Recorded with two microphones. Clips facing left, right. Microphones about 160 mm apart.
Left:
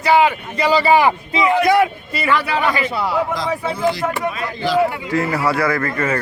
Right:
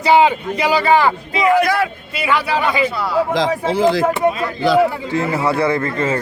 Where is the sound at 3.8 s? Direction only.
25° right (ahead or behind).